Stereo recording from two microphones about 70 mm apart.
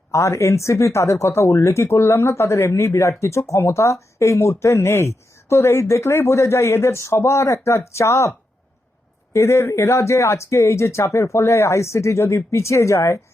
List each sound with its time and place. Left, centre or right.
0.1 s speech: left
9.3 s speech: left